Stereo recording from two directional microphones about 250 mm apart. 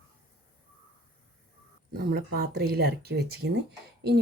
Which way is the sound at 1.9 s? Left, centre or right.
Right.